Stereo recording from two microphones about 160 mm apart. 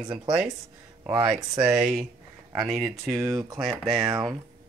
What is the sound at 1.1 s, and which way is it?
Speech, 30° right (ahead or behind).